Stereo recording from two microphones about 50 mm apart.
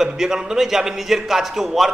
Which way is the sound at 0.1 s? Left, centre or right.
Centre.